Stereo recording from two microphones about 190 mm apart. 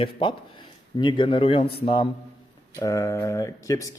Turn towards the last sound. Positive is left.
turn(degrees=15)  # may be behind; listen again after turning